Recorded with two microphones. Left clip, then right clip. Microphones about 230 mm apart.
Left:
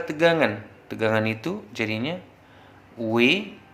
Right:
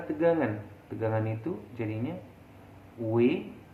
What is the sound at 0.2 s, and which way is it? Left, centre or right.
A man's voice, left.